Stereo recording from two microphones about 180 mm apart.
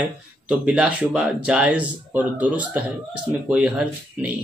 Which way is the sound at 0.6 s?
5° right (ahead or behind).